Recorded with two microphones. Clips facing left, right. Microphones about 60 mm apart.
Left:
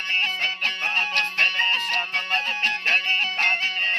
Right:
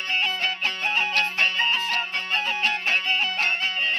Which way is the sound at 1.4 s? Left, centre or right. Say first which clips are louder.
Left 3 dB; left.